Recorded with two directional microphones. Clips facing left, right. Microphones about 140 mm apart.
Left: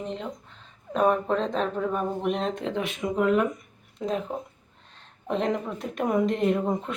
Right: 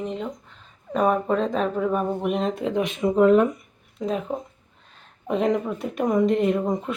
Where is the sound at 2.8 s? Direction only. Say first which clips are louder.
Right 7 dB; 30° right (ahead or behind).